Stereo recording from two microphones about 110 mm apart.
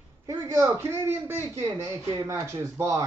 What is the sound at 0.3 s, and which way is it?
Speech, 20° right (ahead or behind).